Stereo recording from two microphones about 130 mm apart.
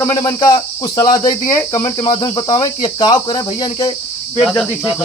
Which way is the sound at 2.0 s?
30° left (ahead or behind).